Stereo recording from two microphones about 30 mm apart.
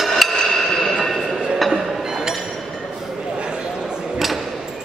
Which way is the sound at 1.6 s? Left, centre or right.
Centre.